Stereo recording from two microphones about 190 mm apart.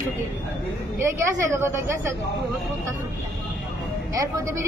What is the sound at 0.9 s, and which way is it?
Speech, 15° right (ahead or behind).